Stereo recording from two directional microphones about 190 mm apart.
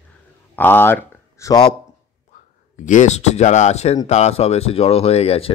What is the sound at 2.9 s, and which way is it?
Speech, 40° left (ahead or behind).